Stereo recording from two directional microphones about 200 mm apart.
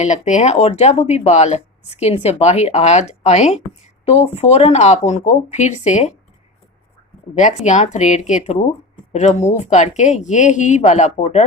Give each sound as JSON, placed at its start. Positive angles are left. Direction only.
{"t": 0.0, "sound": "speech", "side_deg": 35}
{"t": 7.3, "sound": "speech", "side_deg": 35}